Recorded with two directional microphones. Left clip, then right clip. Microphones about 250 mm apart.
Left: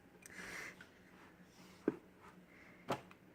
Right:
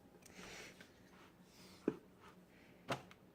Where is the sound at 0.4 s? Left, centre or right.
Left.